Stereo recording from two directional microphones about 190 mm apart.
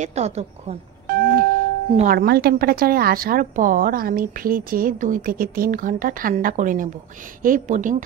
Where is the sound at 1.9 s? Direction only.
45° right (ahead or behind).